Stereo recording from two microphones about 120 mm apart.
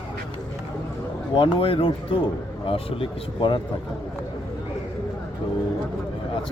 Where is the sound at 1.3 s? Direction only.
45° left (ahead or behind).